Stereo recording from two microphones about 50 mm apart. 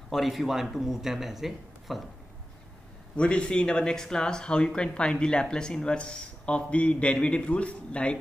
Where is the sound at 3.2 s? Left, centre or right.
Left.